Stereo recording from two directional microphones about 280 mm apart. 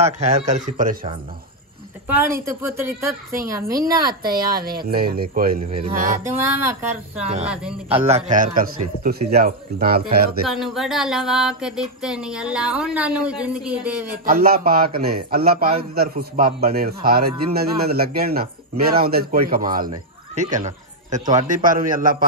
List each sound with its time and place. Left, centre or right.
0.0 s speech: right
2.0 s a woman's voice: centre
4.2 s a man's voice: right
6.2 s a woman's voice: centre
7.4 s a sound: centre
8.3 s a man's voice: right
10.5 s a sound: centre
14.2 s a man's voice: right
19.9 s speech: centre
20.5 s a sound: right
21.4 s speech: right